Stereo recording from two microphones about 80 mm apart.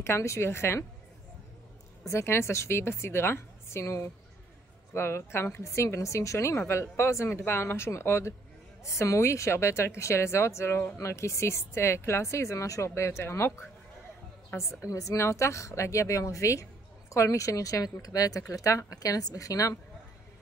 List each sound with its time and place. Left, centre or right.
0.0 s speech: left
2.0 s a woman's voice: left
14.9 s speech: left